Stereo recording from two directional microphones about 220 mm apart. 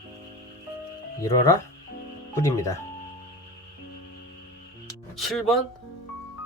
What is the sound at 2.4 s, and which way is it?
Speech, 15° left (ahead or behind).